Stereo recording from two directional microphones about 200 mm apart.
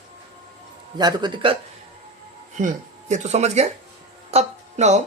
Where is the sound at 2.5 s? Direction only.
35° right (ahead or behind).